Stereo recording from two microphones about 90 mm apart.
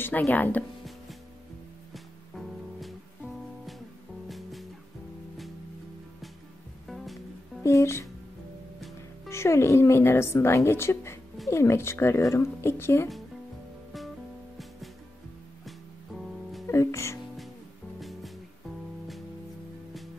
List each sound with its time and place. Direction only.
0.0 s speech: 25° left (ahead or behind)
4.3 s music: centre (ahead or behind)
7.6 s speech: 30° left (ahead or behind)
9.3 s speech: 30° left (ahead or behind)
16.6 s music: 35° left (ahead or behind)